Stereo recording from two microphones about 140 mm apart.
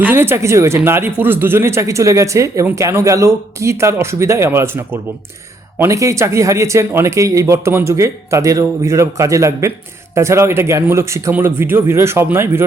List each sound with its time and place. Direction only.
0.0 s speech: 15° right (ahead or behind)